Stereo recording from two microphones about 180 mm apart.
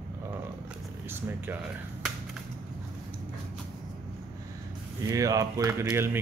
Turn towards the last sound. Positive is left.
turn(degrees=-15)  # may be behind; listen again after turning